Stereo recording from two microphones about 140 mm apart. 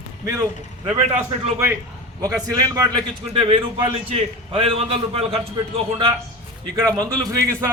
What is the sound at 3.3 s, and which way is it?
A man's voice, 40° right (ahead or behind).